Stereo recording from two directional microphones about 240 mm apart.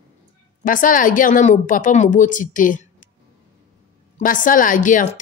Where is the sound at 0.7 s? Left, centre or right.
Left.